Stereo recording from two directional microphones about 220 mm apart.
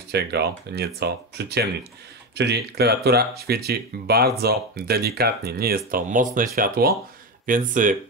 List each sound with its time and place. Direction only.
0.1 s speech: 50° right (ahead or behind)